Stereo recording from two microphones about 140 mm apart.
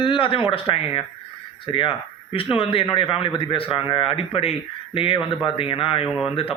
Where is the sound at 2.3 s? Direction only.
40° left (ahead or behind).